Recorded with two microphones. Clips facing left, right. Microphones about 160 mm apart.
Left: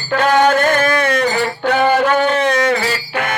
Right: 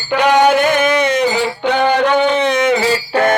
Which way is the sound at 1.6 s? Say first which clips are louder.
Even; 5° left (ahead or behind).